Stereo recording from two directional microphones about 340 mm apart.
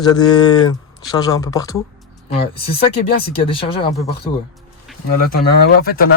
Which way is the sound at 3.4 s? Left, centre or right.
Centre.